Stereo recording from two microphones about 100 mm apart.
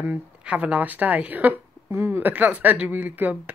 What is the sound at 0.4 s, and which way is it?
Speech, 10° right (ahead or behind).